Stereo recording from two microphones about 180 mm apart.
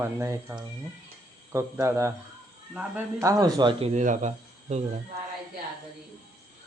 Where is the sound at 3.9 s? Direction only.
45° right (ahead or behind).